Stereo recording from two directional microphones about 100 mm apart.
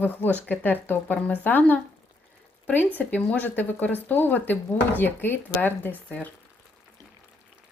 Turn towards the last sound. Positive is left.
turn(degrees=15)  # may be behind; listen again after turning